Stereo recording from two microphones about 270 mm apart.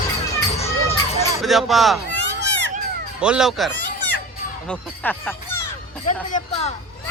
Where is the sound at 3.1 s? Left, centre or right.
Centre.